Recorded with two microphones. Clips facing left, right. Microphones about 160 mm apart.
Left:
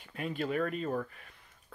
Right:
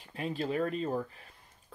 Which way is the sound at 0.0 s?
35° right (ahead or behind).